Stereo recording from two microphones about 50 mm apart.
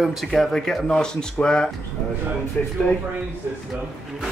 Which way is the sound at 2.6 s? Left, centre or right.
Left.